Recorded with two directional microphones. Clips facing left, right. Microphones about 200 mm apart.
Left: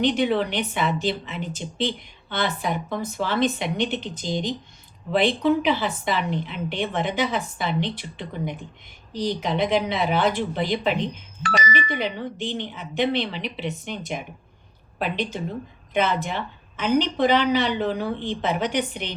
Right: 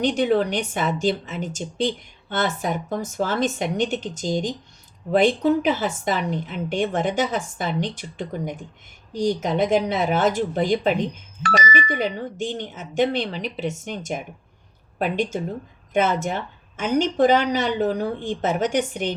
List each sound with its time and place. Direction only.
0.0 s speech: 45° right (ahead or behind)